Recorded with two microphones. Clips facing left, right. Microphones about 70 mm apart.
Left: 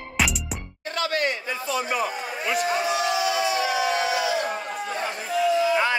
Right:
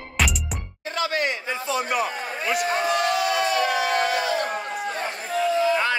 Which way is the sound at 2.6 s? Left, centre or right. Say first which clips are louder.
Right 1 dB; right.